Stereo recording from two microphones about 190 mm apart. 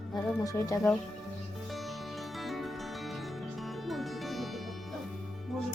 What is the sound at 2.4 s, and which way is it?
Music, centre (ahead or behind).